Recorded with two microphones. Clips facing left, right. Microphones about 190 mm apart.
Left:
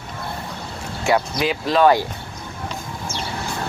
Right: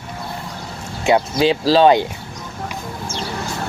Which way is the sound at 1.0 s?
25° right (ahead or behind).